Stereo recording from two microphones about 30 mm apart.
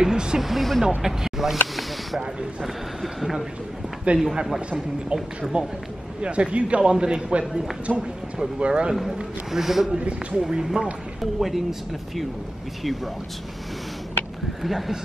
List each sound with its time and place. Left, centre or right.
0.0 s speech: right
0.4 s speech: centre
4.1 s speech: right
5.1 s a man's voice: right
6.2 s speech: right
6.8 s a man's voice: right
7.9 s speech: centre
8.5 s speech: right
8.9 s speech: centre
9.9 s speech: right
10.6 s speech: centre
14.6 s speech: centre